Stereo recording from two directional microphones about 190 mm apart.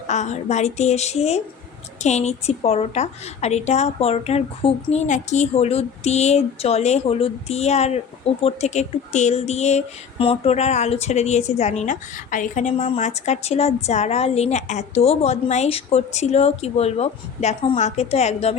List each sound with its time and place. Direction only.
0.1 s speech: 35° left (ahead or behind)